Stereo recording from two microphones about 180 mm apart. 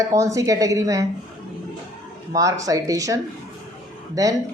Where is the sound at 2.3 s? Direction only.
20° right (ahead or behind).